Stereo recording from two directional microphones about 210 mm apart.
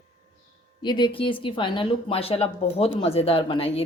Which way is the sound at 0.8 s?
20° left (ahead or behind).